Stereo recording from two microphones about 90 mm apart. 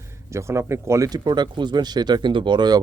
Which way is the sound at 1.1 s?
50° right (ahead or behind).